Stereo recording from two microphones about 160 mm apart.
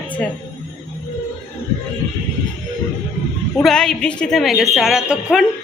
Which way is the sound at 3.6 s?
5° left (ahead or behind).